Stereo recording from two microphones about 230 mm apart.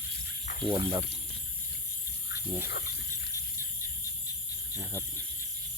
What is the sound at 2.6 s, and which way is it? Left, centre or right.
Speech, left.